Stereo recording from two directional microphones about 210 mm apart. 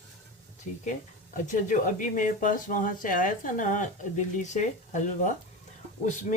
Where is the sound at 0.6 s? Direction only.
35° left (ahead or behind).